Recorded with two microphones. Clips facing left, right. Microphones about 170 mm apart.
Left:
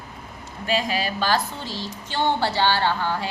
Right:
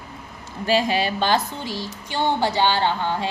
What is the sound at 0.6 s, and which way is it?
A woman's voice, 30° right (ahead or behind).